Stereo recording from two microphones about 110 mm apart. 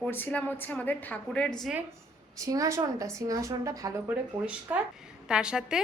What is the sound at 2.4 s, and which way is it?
A woman's voice, 30° right (ahead or behind).